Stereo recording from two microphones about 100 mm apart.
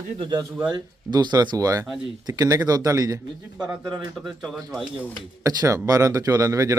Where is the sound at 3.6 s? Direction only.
10° right (ahead or behind).